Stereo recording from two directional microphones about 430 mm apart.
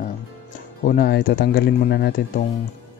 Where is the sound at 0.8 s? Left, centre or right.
Centre.